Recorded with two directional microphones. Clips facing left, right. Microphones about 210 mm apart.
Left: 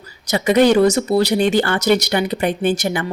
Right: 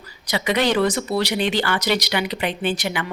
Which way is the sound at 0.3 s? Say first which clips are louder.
Left 7 dB; 45° left (ahead or behind).